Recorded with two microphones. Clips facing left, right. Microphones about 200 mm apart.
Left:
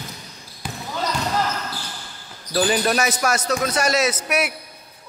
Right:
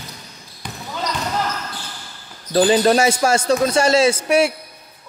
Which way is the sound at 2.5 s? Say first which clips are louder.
Right 6 dB; 30° right (ahead or behind).